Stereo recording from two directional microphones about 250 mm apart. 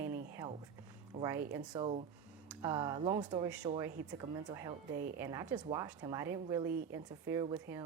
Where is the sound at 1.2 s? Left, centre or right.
Centre.